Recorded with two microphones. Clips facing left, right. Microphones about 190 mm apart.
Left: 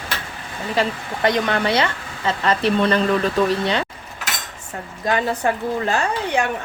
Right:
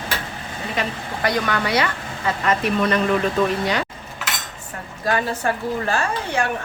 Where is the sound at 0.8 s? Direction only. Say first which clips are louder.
Left 5 dB; 30° left (ahead or behind).